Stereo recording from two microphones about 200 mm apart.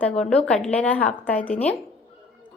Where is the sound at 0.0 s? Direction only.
5° left (ahead or behind).